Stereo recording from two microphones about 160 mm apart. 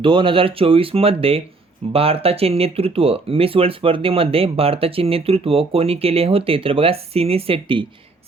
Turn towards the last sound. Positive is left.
turn(degrees=-35)  # may be behind; listen again after turning